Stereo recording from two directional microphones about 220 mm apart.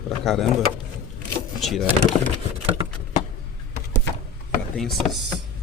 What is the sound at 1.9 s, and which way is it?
Speech, 25° right (ahead or behind).